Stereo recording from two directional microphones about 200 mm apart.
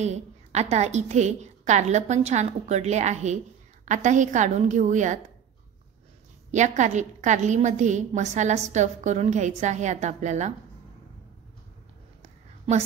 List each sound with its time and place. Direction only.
0.0 s a woman's voice: 35° right (ahead or behind)
6.5 s a woman's voice: 35° right (ahead or behind)
12.2 s a sound: 35° right (ahead or behind)